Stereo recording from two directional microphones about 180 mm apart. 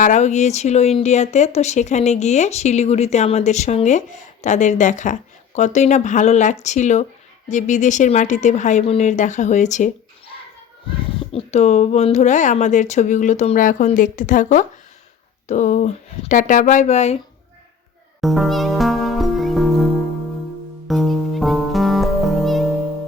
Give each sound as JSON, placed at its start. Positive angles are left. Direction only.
{"t": 0.0, "sound": "speech", "side_deg": 40}
{"t": 11.3, "sound": "speech", "side_deg": 35}
{"t": 18.2, "sound": "music", "side_deg": 0}